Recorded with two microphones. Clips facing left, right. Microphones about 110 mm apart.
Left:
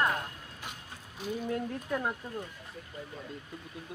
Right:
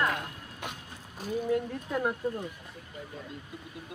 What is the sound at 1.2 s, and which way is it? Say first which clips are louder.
Speech: right 2 dB; 45° right (ahead or behind).